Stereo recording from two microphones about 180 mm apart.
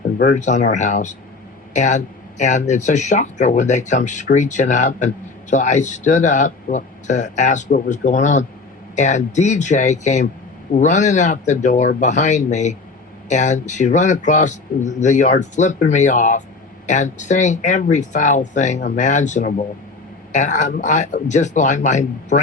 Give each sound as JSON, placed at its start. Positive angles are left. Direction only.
{"t": 0.2, "sound": "speech", "side_deg": 45}